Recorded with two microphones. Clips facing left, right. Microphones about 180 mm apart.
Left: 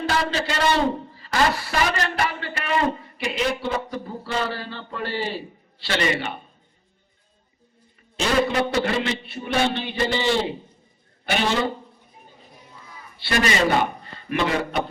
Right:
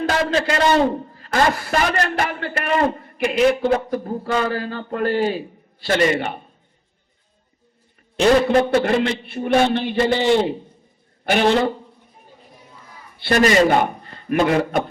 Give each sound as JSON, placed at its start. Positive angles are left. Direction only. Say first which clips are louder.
{"t": 0.1, "sound": "a man's voice", "louder": "right 5 dB", "side_deg": -50}
{"t": 8.1, "sound": "a man's voice", "louder": "right 7 dB", "side_deg": -55}
{"t": 13.1, "sound": "a man's voice", "louder": "right 7 dB", "side_deg": -50}